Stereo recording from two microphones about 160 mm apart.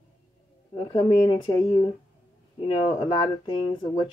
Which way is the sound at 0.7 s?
35° left (ahead or behind).